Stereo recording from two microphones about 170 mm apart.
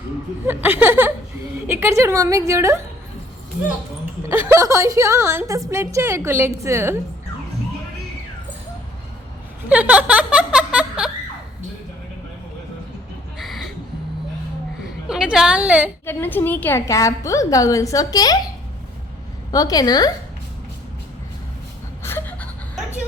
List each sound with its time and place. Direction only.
0.4 s a woman's voice: 10° right (ahead or behind)
4.2 s a woman's voice: 15° right (ahead or behind)
9.6 s giggle: 10° right (ahead or behind)
13.4 s music: centre (ahead or behind)
15.0 s a woman's voice: 5° right (ahead or behind)
16.0 s a woman's voice: 10° left (ahead or behind)
19.5 s a woman's voice: 20° left (ahead or behind)
22.0 s gasp: 10° left (ahead or behind)